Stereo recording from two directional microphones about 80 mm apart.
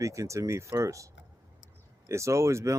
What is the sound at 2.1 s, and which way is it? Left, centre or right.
Speech, right.